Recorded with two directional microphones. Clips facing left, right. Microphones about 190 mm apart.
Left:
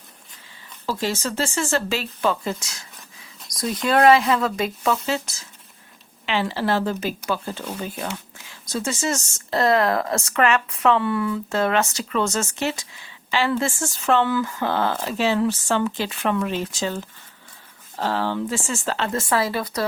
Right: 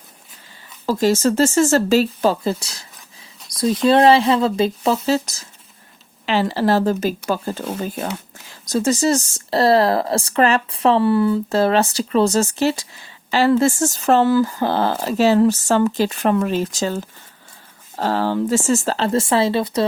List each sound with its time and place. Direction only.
0.9 s speech: 45° right (ahead or behind); by 19.8 s 25° right (ahead or behind)